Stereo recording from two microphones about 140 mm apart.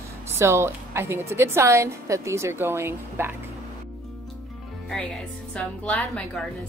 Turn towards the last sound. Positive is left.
turn(degrees=10)  # may be behind; listen again after turning